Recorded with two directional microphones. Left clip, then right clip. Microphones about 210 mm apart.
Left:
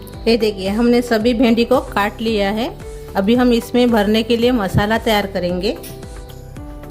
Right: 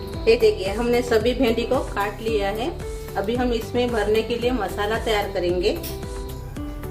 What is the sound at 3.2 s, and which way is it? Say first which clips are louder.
A woman's voice: left 9 dB; 55° left (ahead or behind).